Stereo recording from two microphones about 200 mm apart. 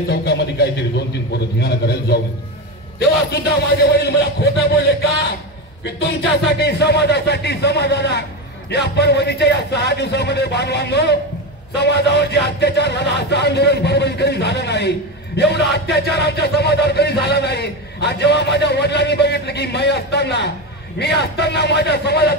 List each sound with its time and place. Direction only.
0.1 s a man's voice: 55° left (ahead or behind)
3.3 s speech: 55° left (ahead or behind)
6.6 s speech: 55° left (ahead or behind)